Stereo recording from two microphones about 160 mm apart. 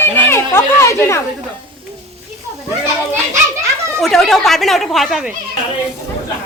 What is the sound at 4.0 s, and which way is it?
Speech, centre (ahead or behind).